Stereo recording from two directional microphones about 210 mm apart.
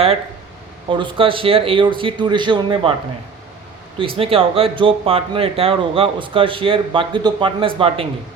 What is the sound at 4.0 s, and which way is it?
Speech, 25° right (ahead or behind).